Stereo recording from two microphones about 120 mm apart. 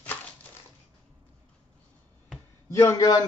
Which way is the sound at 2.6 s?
25° left (ahead or behind).